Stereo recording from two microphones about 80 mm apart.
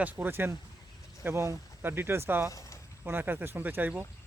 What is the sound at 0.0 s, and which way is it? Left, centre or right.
Speech, right.